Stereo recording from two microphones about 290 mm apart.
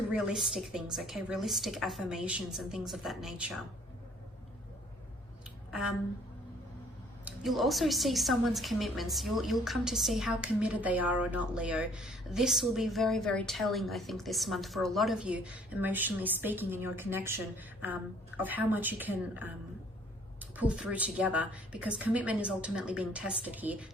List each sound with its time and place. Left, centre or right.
0.1 s a woman's voice: centre
7.3 s a woman's voice: centre